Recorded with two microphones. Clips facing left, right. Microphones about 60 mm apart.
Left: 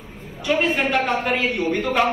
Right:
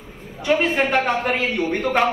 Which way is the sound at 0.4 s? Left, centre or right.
Right.